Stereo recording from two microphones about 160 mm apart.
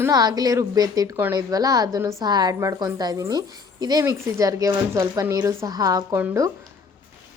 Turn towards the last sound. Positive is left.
turn(degrees=-15)  # may be behind; listen again after turning